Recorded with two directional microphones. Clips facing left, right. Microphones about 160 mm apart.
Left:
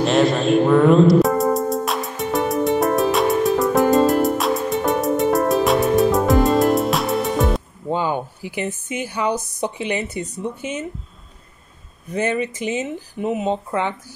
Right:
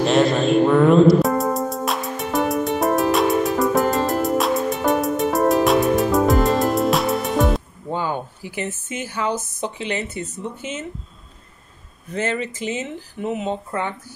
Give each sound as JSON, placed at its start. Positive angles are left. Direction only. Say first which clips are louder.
{"t": 0.0, "sound": "music", "louder": "even", "side_deg": 0}
{"t": 7.9, "sound": "a woman's voice", "louder": "left 3 dB", "side_deg": 15}
{"t": 12.1, "sound": "a woman's voice", "louder": "left 3 dB", "side_deg": 15}